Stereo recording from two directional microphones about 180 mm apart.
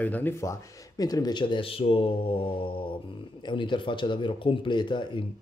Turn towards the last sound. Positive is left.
turn(degrees=25)  # may be behind; listen again after turning